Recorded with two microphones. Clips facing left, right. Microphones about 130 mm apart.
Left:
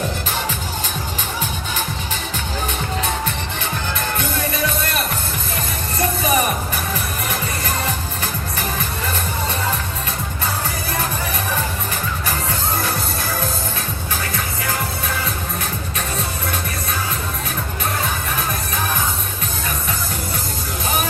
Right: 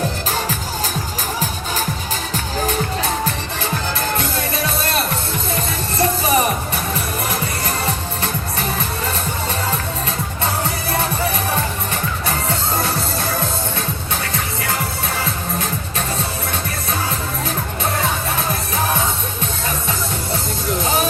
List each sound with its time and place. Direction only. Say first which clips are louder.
6.0 s music: right 2 dB; 30° right (ahead or behind)